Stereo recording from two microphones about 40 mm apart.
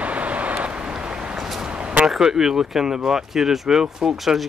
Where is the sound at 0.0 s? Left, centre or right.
Right.